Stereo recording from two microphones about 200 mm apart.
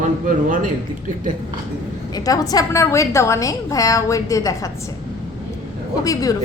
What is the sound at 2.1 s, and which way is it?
A woman's voice, 15° left (ahead or behind).